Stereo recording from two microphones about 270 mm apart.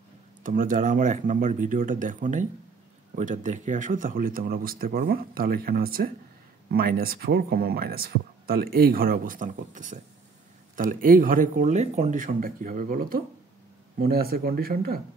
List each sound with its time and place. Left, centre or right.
0.4 s speech: right